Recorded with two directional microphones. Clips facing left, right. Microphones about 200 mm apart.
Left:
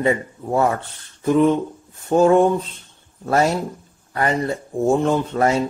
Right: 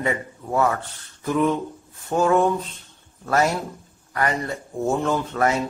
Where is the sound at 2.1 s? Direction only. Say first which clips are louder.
Left 5 dB; 30° left (ahead or behind).